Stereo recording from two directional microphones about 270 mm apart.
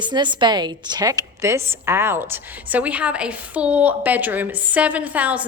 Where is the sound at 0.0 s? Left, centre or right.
Centre.